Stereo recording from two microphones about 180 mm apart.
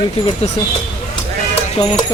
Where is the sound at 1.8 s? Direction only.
30° left (ahead or behind).